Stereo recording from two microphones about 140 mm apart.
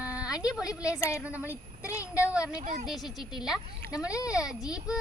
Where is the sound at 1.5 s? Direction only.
20° left (ahead or behind).